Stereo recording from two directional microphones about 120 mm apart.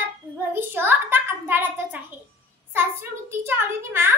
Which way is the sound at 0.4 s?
20° right (ahead or behind).